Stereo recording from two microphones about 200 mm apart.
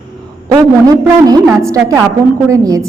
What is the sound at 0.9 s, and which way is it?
A man's voice, 20° right (ahead or behind).